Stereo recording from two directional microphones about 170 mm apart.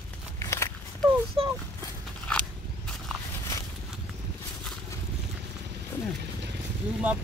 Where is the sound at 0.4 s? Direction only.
20° left (ahead or behind).